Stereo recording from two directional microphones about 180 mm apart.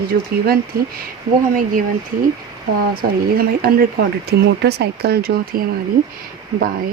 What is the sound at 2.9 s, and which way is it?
Speech, 55° right (ahead or behind).